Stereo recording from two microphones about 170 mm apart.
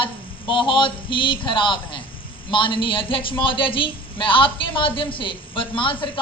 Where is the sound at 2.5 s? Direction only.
30° left (ahead or behind).